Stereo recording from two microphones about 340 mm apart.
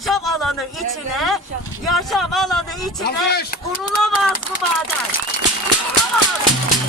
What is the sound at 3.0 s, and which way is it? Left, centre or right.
Speech, left.